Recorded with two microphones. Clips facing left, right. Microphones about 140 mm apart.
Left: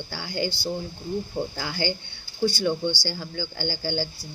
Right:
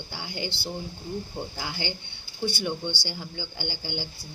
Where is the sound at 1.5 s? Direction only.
20° right (ahead or behind).